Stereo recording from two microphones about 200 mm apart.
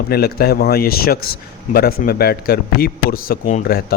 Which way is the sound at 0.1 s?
50° left (ahead or behind).